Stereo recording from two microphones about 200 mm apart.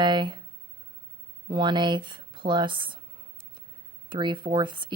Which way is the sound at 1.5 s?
25° right (ahead or behind).